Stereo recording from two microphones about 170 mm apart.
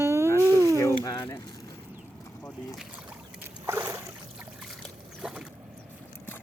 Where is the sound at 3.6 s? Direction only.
15° right (ahead or behind).